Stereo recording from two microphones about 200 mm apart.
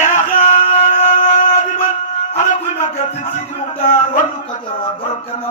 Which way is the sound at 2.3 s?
40° left (ahead or behind).